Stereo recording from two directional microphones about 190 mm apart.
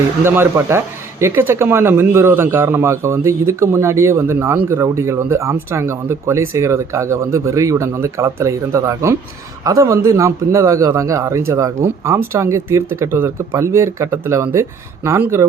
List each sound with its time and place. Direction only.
0.3 s a man's voice: 15° right (ahead or behind)